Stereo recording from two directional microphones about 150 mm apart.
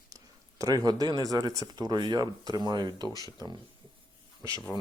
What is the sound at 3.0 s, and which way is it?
Speech, 25° left (ahead or behind).